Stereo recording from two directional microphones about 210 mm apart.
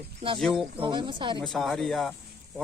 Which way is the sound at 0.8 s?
20° right (ahead or behind).